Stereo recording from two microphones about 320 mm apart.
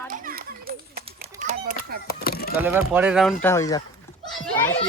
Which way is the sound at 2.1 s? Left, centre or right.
Left.